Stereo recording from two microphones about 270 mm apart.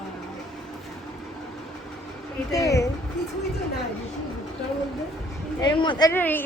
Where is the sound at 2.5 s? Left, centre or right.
Centre.